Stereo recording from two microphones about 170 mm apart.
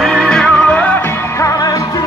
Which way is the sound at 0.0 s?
Centre (ahead or behind).